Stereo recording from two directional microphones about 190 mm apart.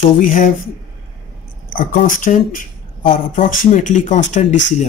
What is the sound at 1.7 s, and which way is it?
Speech, 45° left (ahead or behind).